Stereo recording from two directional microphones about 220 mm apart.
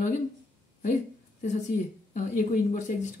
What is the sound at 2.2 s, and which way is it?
Speech, 35° left (ahead or behind).